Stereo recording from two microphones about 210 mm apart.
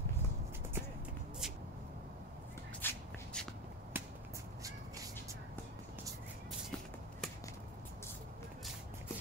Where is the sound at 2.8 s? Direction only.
10° left (ahead or behind).